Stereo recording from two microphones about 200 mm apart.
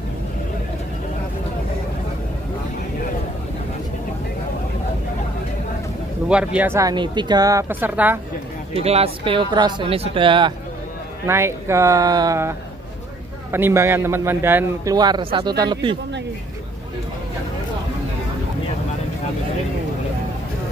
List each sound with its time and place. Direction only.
6.2 s a man's voice: 5° right (ahead or behind)
8.7 s speech: 30° right (ahead or behind)
11.2 s a man's voice: 15° right (ahead or behind)